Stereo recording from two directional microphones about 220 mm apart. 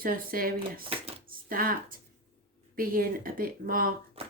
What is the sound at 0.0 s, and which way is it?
Speech, 40° right (ahead or behind).